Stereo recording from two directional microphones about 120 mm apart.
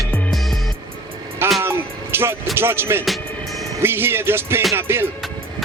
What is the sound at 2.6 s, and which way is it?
Music, 20° right (ahead or behind).